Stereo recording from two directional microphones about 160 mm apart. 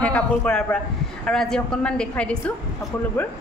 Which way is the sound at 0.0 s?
5° left (ahead or behind).